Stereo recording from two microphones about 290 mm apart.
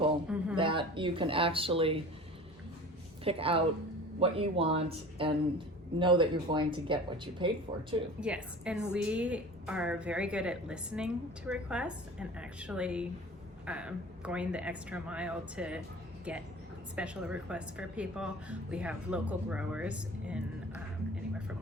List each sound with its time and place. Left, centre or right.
0.3 s a sound: centre
0.5 s speech: centre
3.2 s speech: centre
8.2 s a woman's voice: centre
16.9 s a woman's voice: centre